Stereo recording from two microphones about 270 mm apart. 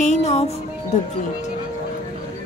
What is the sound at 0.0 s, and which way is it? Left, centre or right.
Music, left.